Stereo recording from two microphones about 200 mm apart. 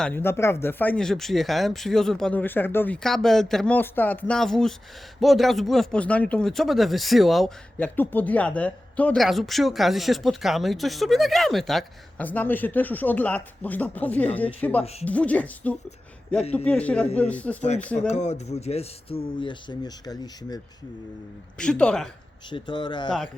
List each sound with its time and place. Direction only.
0.0 s speech: 10° left (ahead or behind)
18.1 s speech: 35° left (ahead or behind); by 20.6 s 20° left (ahead or behind)
21.6 s speech: 5° left (ahead or behind)
22.4 s speech: 25° left (ahead or behind)